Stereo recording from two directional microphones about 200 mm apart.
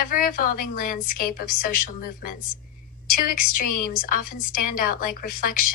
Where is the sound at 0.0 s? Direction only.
45° left (ahead or behind).